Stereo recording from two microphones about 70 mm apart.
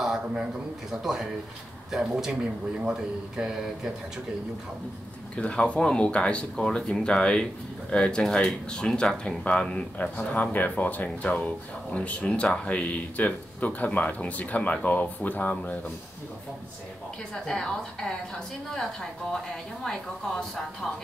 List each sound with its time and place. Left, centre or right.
0.0 s a sound: centre
1.0 s speech: centre
5.3 s speech: centre
17.5 s a woman's voice: centre